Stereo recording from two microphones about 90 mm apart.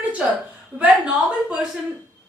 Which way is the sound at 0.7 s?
15° right (ahead or behind).